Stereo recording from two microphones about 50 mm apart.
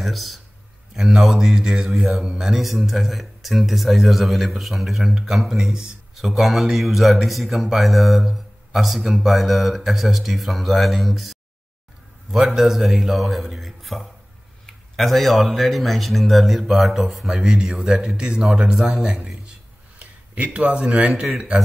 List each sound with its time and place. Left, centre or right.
0.0 s speech: centre
18.8 s speech: centre
20.0 s a sound: right
21.0 s a man's voice: right
21.4 s speech: centre